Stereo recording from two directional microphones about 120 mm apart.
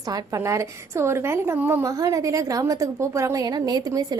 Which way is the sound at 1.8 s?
30° right (ahead or behind).